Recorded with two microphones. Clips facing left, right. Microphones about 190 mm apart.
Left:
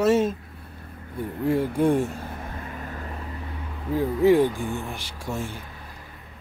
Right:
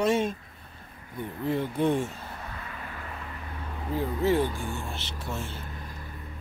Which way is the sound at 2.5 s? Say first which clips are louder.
Left 5 dB; 45° left (ahead or behind).